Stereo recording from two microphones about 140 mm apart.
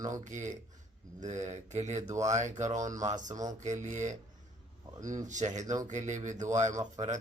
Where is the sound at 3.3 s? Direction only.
25° right (ahead or behind).